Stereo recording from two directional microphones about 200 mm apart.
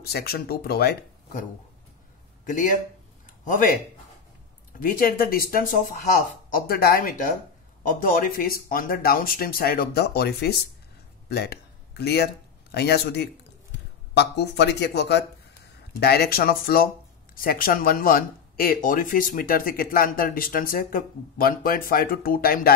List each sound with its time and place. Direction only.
0.0 s speech: 50° left (ahead or behind)
2.4 s speech: 40° left (ahead or behind)
4.7 s speech: 45° left (ahead or behind)